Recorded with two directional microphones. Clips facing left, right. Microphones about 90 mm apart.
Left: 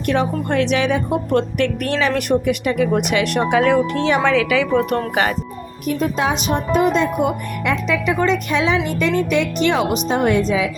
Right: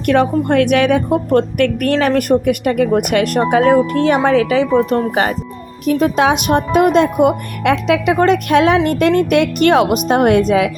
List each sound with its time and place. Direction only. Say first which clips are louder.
0.0 s a woman's voice: right 6 dB; 55° right (ahead or behind); by 5.4 s 35° right (ahead or behind)
5.8 s a woman's voice: right 6 dB; 90° right; by 10.7 s 60° right (ahead or behind)